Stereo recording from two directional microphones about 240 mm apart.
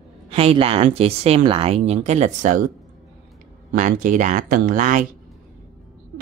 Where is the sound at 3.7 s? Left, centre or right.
Right.